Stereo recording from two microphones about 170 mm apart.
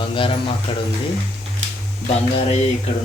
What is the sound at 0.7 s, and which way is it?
Speech, 30° left (ahead or behind).